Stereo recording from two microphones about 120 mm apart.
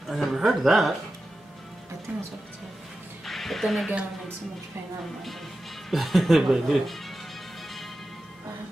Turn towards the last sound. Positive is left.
turn(degrees=0)  # may be behind; listen again after turning